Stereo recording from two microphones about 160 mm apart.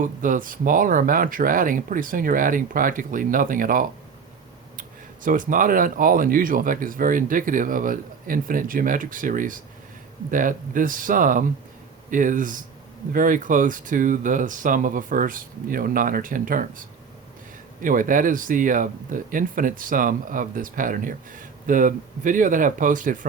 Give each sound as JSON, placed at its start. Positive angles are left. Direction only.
{"t": 0.0, "sound": "speech", "side_deg": -55}
{"t": 17.8, "sound": "speech", "side_deg": -55}